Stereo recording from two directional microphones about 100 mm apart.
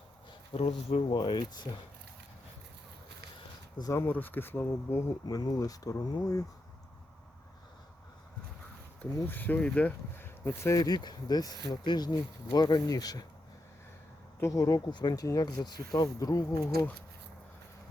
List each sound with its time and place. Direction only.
0.5 s speech: 75° left (ahead or behind)
1.1 s speech: 50° left (ahead or behind)
3.9 s speech: 20° left (ahead or behind)
5.2 s speech: 45° left (ahead or behind)
9.2 s speech: 20° left (ahead or behind); by 13.2 s 40° left (ahead or behind)
14.4 s speech: 40° left (ahead or behind)